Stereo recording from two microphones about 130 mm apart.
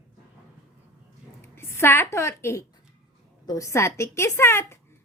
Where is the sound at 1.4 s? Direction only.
20° left (ahead or behind).